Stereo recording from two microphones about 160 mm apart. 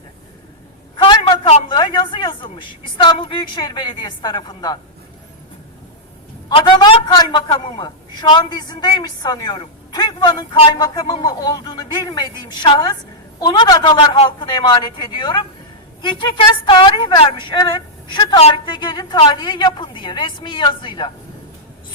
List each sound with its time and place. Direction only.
0.9 s a man's voice: 30° left (ahead or behind)
6.5 s a man's voice: 30° left (ahead or behind)